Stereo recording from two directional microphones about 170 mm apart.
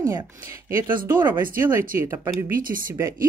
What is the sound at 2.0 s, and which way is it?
Speech, 15° right (ahead or behind).